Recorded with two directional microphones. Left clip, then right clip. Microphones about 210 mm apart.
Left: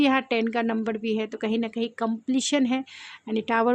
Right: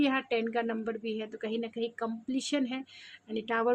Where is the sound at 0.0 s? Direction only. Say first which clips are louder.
Left 7 dB; 40° left (ahead or behind).